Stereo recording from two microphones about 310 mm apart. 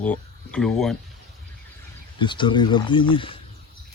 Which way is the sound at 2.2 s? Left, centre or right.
Centre.